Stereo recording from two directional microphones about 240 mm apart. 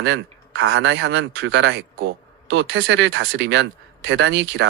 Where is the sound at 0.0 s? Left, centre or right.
Right.